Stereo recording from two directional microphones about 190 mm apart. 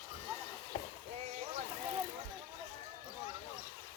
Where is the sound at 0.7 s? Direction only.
35° left (ahead or behind).